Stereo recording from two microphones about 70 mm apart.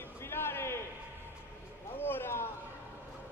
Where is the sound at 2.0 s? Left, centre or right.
Left.